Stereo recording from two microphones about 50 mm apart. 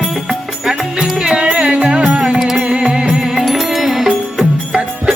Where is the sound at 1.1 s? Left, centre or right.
Centre.